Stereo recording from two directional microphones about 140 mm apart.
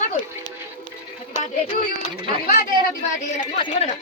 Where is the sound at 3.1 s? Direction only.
65° left (ahead or behind).